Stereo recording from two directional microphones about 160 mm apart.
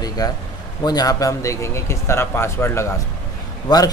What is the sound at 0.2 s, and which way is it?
Speech, 25° left (ahead or behind).